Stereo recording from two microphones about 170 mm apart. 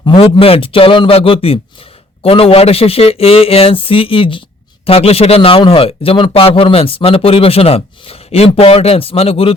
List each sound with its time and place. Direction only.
0.0 s a man's voice: 30° left (ahead or behind)